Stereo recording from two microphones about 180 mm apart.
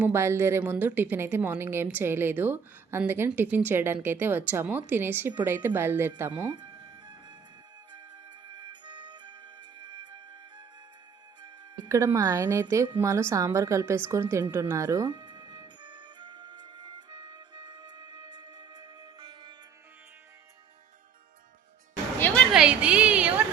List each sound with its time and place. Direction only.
0.0 s a woman's voice: 15° right (ahead or behind)
6.5 s music: 25° right (ahead or behind)
8.5 s music: 25° right (ahead or behind)
11.4 s a woman's voice: 20° right (ahead or behind)
14.5 s music: 15° right (ahead or behind)
22.5 s a sound: 5° right (ahead or behind)